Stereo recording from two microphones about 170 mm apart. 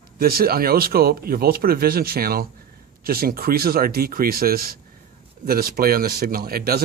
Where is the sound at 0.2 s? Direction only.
60° right (ahead or behind).